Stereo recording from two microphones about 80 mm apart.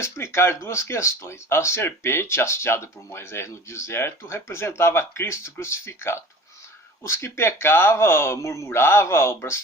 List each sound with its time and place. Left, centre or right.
0.0 s speech: left